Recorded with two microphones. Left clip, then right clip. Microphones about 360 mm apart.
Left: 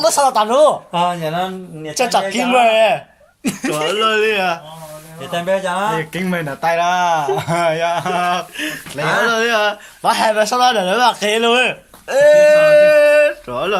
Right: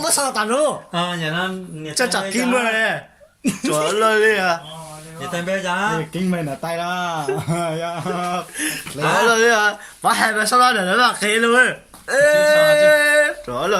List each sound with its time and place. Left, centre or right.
0.0 s speech: centre
6.1 s speech: left
8.5 s speech: centre